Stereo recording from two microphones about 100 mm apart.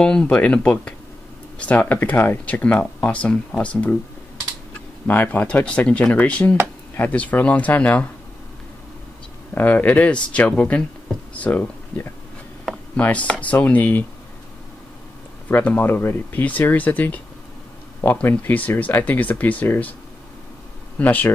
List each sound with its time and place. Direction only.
0.0 s speech: 10° left (ahead or behind)
5.0 s speech: 20° left (ahead or behind)
9.5 s speech: 15° left (ahead or behind)
15.4 s speech: 15° left (ahead or behind)
21.0 s speech: 15° left (ahead or behind)